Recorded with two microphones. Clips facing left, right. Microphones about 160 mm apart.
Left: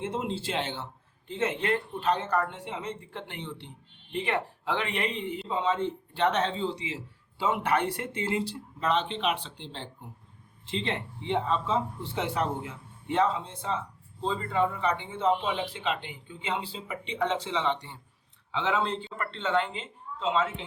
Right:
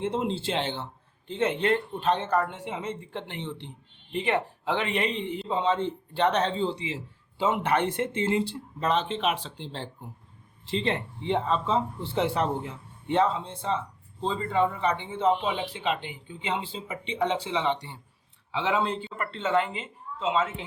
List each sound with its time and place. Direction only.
0.0 s a man's voice: 30° right (ahead or behind)
8.8 s a man's voice: 40° right (ahead or behind); by 20.7 s 5° right (ahead or behind)